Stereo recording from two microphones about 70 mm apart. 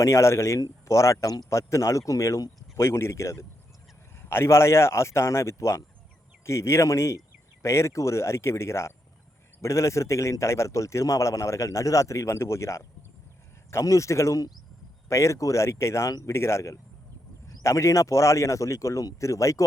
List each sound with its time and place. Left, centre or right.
0.0 s a man's voice: left